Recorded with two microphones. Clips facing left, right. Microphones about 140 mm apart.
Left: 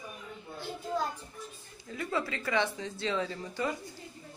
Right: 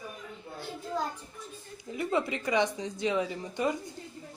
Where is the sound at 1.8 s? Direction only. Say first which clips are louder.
Right 4 dB; 20° right (ahead or behind).